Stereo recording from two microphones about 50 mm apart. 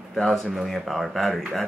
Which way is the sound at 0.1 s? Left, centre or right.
Centre.